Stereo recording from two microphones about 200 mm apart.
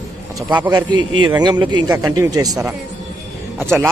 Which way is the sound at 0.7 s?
20° right (ahead or behind).